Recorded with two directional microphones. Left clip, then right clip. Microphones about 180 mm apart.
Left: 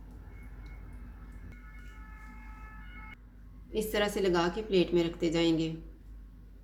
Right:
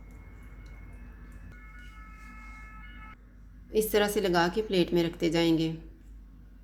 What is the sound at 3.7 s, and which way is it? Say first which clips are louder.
A woman's voice: right 5 dB; 40° right (ahead or behind).